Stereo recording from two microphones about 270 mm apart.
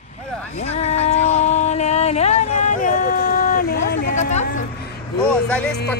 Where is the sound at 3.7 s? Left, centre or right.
Left.